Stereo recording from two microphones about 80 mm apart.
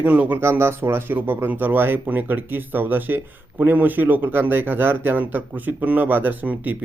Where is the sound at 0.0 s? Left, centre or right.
Right.